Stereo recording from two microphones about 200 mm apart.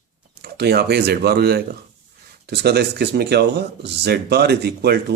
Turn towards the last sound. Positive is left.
turn(degrees=-55)  # may be behind; listen again after turning